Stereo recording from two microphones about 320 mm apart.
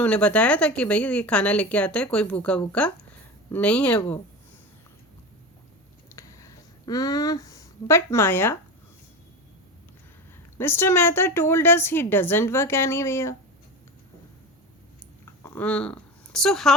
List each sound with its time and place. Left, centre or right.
0.0 s speech: centre
6.1 s a sound: centre
10.6 s a woman's voice: centre
15.4 s speech: centre